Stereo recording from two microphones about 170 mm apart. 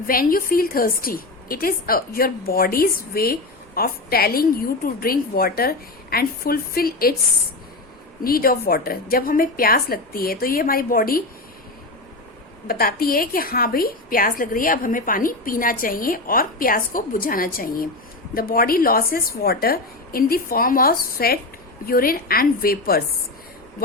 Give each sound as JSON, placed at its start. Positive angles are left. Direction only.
{"t": 0.1, "sound": "a woman's voice", "side_deg": 55}
{"t": 8.2, "sound": "a woman's voice", "side_deg": 60}
{"t": 12.6, "sound": "a woman's voice", "side_deg": 60}